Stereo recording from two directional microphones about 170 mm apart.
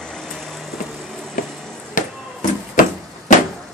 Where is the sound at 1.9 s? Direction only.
55° left (ahead or behind).